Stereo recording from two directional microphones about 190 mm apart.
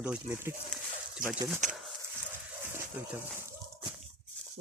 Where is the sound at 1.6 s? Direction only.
40° right (ahead or behind).